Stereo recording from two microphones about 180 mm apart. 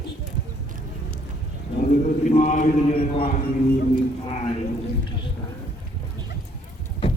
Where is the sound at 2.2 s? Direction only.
40° left (ahead or behind).